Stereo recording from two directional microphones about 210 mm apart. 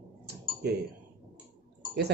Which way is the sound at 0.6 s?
50° right (ahead or behind).